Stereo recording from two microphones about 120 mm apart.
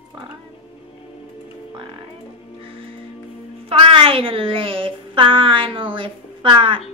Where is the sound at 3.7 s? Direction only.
50° right (ahead or behind).